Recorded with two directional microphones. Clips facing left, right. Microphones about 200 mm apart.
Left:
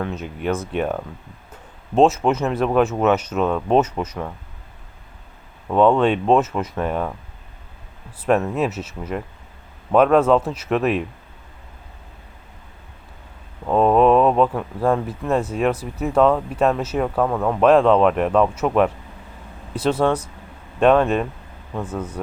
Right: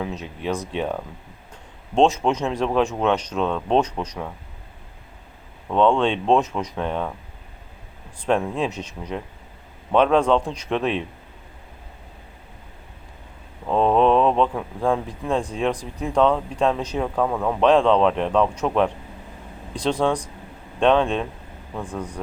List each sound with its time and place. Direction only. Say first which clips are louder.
0.0 s speech: left 3 dB; centre (ahead or behind)
5.6 s speech: left 3 dB; 5° left (ahead or behind)
8.2 s speech: left 3 dB; 5° left (ahead or behind)
13.7 s speech: left 3 dB; 5° left (ahead or behind)